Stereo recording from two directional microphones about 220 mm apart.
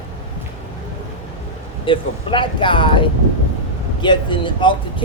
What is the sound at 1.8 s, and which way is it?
Speech, 20° left (ahead or behind).